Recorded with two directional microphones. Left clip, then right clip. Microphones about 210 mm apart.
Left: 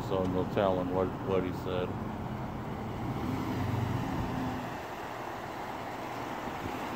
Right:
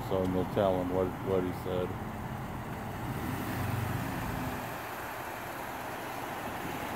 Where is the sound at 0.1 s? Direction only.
45° right (ahead or behind).